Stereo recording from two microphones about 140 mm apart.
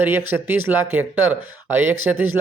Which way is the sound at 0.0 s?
15° right (ahead or behind).